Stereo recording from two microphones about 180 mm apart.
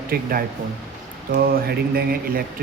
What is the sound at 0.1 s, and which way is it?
Speech, 55° right (ahead or behind).